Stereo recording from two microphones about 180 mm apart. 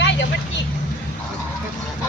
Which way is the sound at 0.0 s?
75° left (ahead or behind).